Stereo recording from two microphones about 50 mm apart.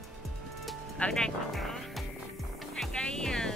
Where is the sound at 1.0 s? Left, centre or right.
Left.